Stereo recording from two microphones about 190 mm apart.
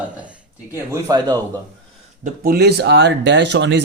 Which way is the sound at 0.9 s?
20° right (ahead or behind).